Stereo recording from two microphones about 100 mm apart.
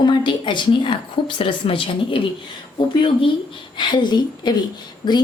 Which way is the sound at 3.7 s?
50° left (ahead or behind).